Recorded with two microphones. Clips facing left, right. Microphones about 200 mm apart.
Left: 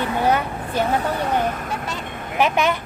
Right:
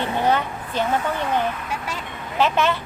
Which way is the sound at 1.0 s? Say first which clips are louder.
Left 1 dB; 35° left (ahead or behind).